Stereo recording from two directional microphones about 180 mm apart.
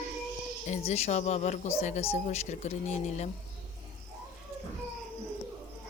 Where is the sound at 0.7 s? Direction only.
35° left (ahead or behind).